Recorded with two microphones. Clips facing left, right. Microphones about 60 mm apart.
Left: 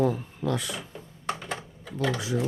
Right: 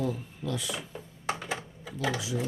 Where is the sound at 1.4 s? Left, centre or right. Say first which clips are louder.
Even; centre.